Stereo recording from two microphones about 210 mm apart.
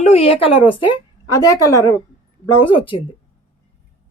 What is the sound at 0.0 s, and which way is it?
A woman's voice, 30° left (ahead or behind).